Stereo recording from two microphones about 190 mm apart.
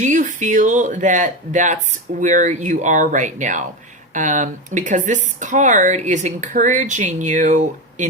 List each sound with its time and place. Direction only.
0.0 s speech: 40° right (ahead or behind)